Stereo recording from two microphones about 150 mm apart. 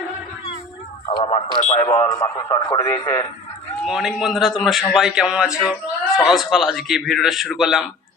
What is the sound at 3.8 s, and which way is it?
A man's voice, 5° right (ahead or behind).